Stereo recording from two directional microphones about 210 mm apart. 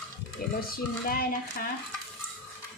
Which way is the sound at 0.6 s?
45° left (ahead or behind).